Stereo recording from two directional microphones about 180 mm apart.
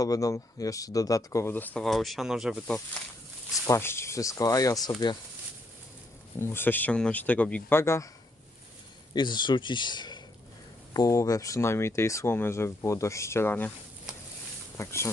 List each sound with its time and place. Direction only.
0.0 s speech: 20° left (ahead or behind); by 2.7 s centre (ahead or behind)
3.5 s speech: 15° left (ahead or behind)
6.4 s speech: 10° left (ahead or behind)
9.1 s speech: 25° left (ahead or behind)
14.8 s speech: 15° left (ahead or behind)